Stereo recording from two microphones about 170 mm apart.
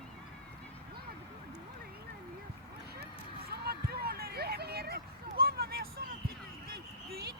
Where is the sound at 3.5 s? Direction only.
65° right (ahead or behind).